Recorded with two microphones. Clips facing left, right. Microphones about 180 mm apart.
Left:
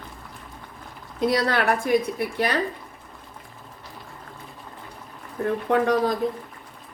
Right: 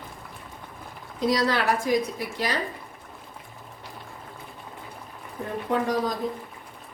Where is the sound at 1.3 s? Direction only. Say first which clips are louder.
Left 1 dB; 55° left (ahead or behind).